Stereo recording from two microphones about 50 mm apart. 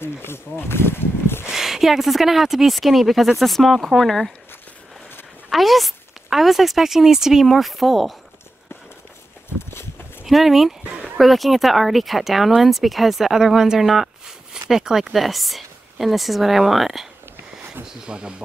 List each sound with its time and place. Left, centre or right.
0.0 s a sound: left
0.6 s speech: left
1.5 s speech: centre
5.5 s speech: centre
10.2 s speech: centre
10.8 s a sound: centre
11.1 s speech: centre
17.8 s speech: centre